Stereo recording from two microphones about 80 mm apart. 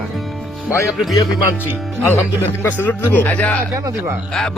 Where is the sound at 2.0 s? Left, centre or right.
Left.